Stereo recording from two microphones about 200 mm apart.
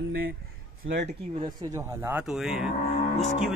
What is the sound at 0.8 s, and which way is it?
Speech, 65° right (ahead or behind).